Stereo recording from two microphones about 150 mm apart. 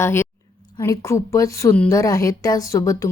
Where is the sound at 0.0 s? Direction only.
15° left (ahead or behind).